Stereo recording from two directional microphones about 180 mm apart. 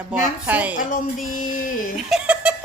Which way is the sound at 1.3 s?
50° left (ahead or behind).